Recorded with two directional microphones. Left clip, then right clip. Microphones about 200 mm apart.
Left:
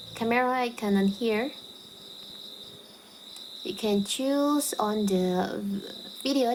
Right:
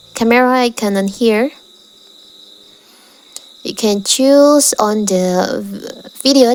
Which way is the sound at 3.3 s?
50° right (ahead or behind).